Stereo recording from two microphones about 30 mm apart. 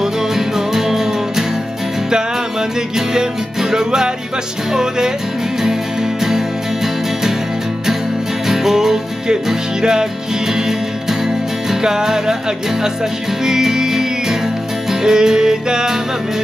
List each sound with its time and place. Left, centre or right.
0.7 s music: centre
3.7 s music: centre
8.5 s music: centre
11.8 s music: centre
13.5 s music: centre